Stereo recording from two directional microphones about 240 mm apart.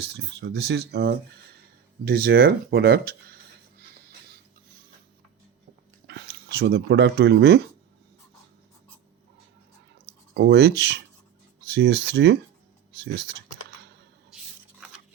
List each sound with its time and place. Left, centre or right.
0.0 s speech: right
6.1 s speech: right
10.3 s speech: right
13.0 s computer keyboard: right